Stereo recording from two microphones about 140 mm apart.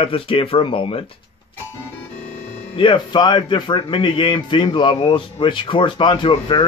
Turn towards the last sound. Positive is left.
turn(degrees=35)  # may be behind; listen again after turning